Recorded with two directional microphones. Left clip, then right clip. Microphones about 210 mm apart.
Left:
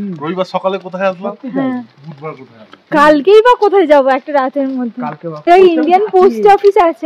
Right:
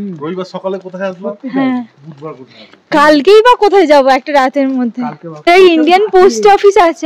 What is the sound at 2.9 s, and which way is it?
A woman's voice, 20° right (ahead or behind).